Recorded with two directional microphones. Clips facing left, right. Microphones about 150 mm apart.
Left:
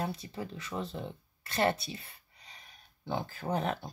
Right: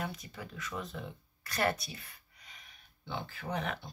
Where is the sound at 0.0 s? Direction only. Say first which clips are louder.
Left 4 dB; 30° left (ahead or behind).